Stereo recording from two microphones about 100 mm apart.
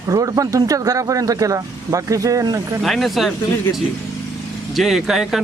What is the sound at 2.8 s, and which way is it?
Speech, centre (ahead or behind).